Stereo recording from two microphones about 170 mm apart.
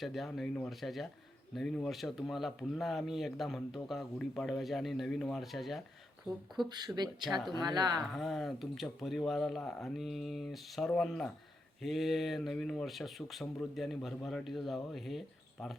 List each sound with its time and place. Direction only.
0.0 s speech: centre (ahead or behind)
6.7 s speech: 25° right (ahead or behind)
7.3 s speech: centre (ahead or behind)
7.6 s speech: 25° right (ahead or behind)
8.0 s speech: centre (ahead or behind)